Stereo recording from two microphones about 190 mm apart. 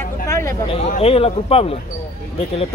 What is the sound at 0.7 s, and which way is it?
Speech, 30° left (ahead or behind).